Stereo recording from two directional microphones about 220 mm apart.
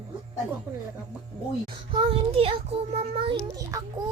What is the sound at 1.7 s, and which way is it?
Child singing, 20° right (ahead or behind).